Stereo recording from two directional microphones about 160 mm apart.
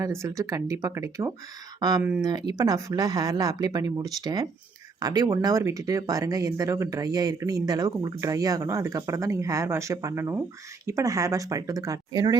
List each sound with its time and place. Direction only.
0.0 s speech: 20° right (ahead or behind)